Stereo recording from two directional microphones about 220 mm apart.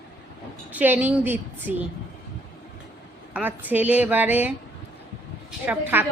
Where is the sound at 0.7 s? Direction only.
5° right (ahead or behind).